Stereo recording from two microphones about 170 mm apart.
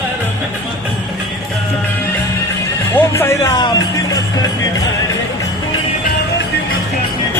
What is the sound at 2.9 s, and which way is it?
Music, 15° left (ahead or behind).